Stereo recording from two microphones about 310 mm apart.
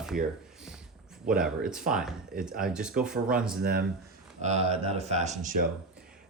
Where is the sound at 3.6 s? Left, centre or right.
Right.